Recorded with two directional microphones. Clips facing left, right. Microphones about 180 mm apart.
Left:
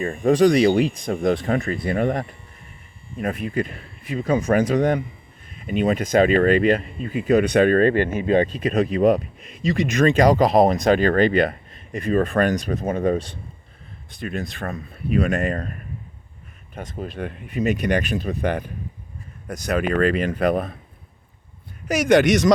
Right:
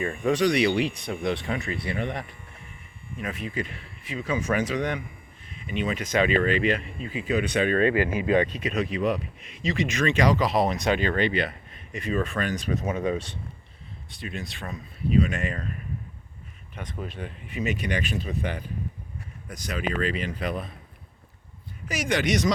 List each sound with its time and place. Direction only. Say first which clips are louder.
0.0 s speech: left 7 dB; 45° left (ahead or behind)
8.6 s speech: left 8 dB; 45° left (ahead or behind)
16.7 s speech: left 4 dB; 40° left (ahead or behind)
17.2 s speech: left 8 dB; 55° left (ahead or behind)